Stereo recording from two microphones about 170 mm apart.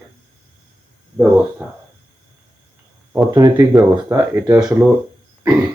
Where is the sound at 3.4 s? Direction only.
20° right (ahead or behind).